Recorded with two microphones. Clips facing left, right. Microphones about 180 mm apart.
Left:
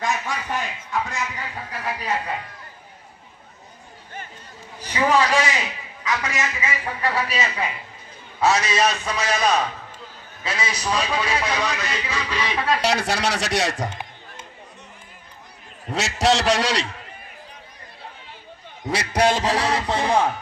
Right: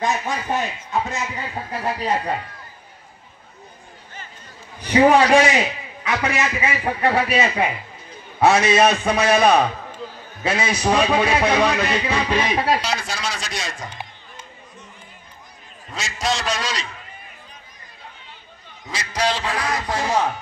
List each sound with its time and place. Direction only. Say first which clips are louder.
0.0 s a sound: right 3 dB; 20° right (ahead or behind)
5.2 s a man's voice: right 6 dB; 30° right (ahead or behind)
5.6 s a sound: right 7 dB; 55° right (ahead or behind)
6.3 s music: right 4 dB; 60° right (ahead or behind)
8.6 s music: right 6 dB; 55° right (ahead or behind)
12.5 s a man's voice: left 1 dB; 30° right (ahead or behind)
12.8 s speech: left 5 dB; 70° left (ahead or behind)
15.9 s speech: left 5 dB; 75° left (ahead or behind)
18.9 s a man's voice: left 4 dB; 60° left (ahead or behind); by 20.2 s 20° left (ahead or behind)